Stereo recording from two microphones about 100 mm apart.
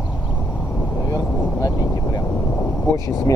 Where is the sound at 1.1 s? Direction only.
35° left (ahead or behind).